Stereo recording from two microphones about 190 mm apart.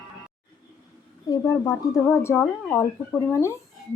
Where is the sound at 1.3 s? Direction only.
15° left (ahead or behind).